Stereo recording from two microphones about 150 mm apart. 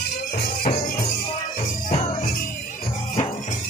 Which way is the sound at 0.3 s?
65° left (ahead or behind).